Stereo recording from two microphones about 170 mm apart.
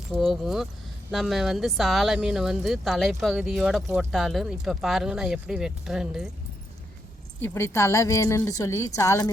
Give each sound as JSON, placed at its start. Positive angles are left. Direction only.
{"t": 0.2, "sound": "speech", "side_deg": 0}
{"t": 7.4, "sound": "a woman's voice", "side_deg": 15}